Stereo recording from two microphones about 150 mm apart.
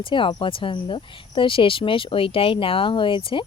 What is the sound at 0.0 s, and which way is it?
Speech, 35° left (ahead or behind).